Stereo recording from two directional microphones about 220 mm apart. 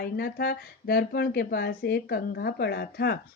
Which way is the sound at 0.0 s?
45° left (ahead or behind).